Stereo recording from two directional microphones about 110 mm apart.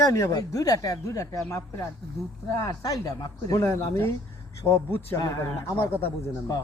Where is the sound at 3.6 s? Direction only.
20° left (ahead or behind).